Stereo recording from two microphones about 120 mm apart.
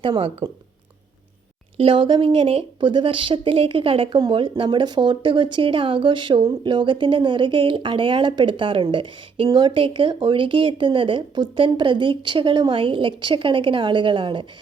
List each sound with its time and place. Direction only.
0.0 s speech: 50° right (ahead or behind)
1.8 s speech: 45° right (ahead or behind)